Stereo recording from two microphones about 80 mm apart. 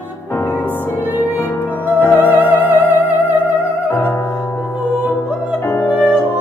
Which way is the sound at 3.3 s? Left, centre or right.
Centre.